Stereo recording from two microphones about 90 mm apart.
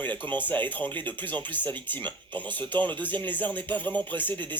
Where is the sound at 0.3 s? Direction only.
20° left (ahead or behind).